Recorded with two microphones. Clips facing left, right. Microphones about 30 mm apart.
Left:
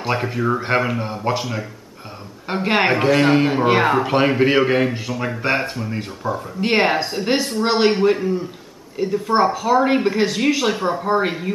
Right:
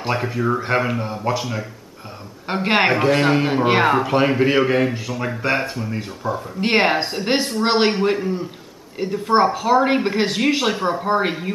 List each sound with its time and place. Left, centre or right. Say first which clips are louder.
0.1 s a man's voice: even; centre
1.0 s a man's voice: left 1 dB; centre
1.4 s a man's voice: even; centre
2.4 s speech: right 1 dB; centre
2.9 s a man's voice: left 1 dB; centre
3.6 s speech: right 3 dB; centre
4.0 s a man's voice: left 1 dB; centre
6.6 s a man's voice: even; centre